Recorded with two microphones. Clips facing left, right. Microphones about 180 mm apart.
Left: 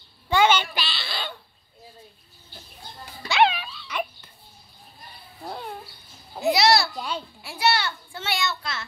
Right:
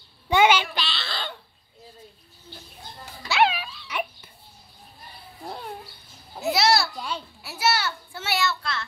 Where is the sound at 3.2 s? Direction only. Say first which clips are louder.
Left 1 dB; 5° right (ahead or behind).